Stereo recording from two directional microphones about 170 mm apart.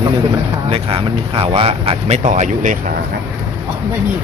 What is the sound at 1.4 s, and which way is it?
Speech, 35° right (ahead or behind).